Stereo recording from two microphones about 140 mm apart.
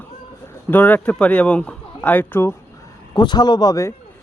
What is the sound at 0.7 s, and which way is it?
Speech, 15° left (ahead or behind).